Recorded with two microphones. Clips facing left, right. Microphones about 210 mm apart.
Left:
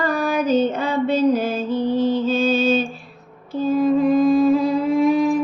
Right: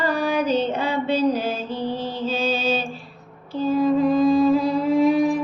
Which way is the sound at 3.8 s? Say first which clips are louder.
Left 2 dB; 50° left (ahead or behind).